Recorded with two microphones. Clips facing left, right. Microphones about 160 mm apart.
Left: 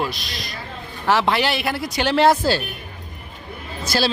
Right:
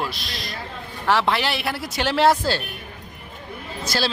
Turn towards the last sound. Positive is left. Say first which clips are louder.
# left 3 dB
turn(degrees=10)  # may be behind; listen again after turning